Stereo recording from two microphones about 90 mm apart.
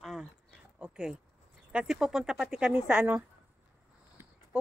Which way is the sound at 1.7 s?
10° right (ahead or behind).